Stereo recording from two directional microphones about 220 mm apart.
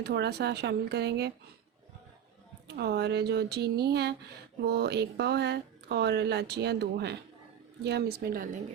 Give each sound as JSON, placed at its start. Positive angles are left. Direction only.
{"t": 0.0, "sound": "speech", "side_deg": -50}
{"t": 2.6, "sound": "speech", "side_deg": -45}